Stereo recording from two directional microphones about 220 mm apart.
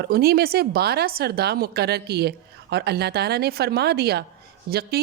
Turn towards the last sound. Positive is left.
turn(degrees=-45)  # may be behind; listen again after turning